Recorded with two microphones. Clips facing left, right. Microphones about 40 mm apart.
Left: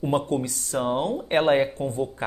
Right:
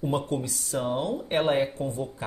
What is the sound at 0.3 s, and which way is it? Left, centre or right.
A woman's voice, left.